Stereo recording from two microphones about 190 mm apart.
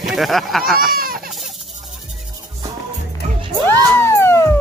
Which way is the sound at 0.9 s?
50° right (ahead or behind).